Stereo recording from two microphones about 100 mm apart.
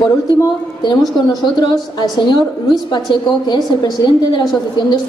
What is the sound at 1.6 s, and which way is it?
A woman's voice, 50° left (ahead or behind).